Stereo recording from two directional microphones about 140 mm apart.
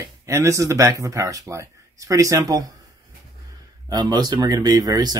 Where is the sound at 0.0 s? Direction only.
20° right (ahead or behind).